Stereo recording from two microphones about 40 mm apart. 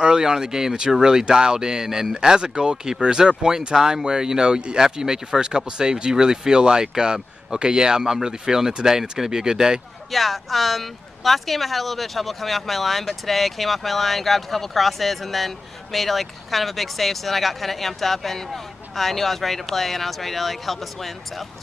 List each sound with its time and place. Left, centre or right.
0.0 s speech: centre
10.1 s speech: centre